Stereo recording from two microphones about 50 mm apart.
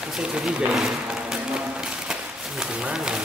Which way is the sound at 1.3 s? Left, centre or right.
Centre.